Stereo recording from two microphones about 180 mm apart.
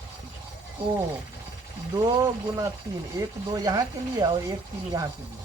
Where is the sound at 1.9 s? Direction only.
20° right (ahead or behind).